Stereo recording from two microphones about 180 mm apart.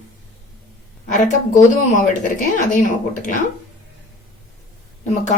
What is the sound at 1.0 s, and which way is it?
Speech, 45° left (ahead or behind).